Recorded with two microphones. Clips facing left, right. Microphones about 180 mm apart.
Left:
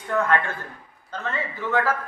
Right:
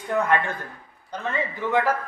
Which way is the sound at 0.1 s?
15° right (ahead or behind).